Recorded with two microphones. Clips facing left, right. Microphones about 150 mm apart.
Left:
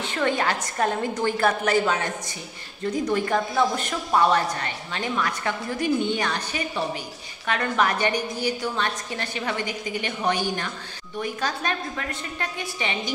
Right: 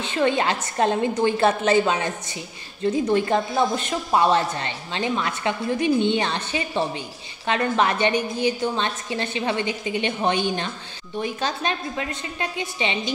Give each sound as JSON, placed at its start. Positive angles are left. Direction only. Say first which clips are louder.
{"t": 0.0, "sound": "a woman's voice", "louder": "right 3 dB", "side_deg": -20}